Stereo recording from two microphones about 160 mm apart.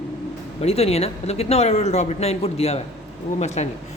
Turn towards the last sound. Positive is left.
turn(degrees=45)  # may be behind; listen again after turning